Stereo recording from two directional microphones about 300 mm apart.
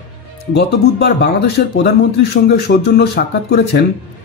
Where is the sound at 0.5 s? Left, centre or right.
Left.